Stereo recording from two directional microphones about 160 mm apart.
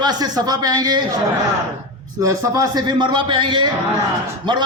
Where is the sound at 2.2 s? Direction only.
20° right (ahead or behind).